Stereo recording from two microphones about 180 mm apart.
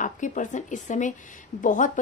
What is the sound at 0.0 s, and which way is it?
Speech, 45° left (ahead or behind).